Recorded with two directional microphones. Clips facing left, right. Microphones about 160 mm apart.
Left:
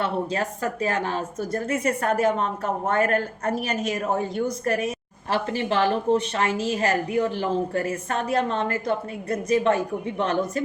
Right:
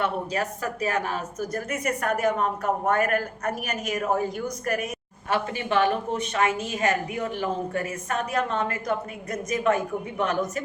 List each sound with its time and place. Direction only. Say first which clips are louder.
0.0 s a woman's voice: left 1 dB; 30° left (ahead or behind)